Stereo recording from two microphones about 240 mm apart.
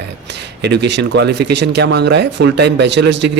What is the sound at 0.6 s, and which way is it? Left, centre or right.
Speech, right.